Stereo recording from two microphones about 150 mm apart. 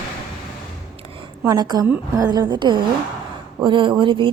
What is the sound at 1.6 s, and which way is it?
A woman's voice, 25° right (ahead or behind).